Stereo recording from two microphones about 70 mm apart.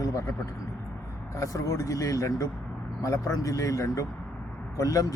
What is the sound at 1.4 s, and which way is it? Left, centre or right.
A man's voice, left.